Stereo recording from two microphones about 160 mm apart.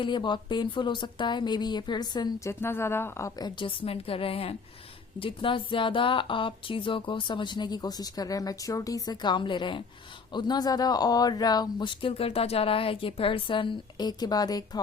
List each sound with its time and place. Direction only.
0.0 s speech: 30° left (ahead or behind)
2.5 s speech: 15° left (ahead or behind)